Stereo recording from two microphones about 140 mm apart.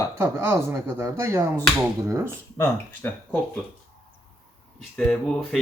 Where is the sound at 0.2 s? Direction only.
20° right (ahead or behind).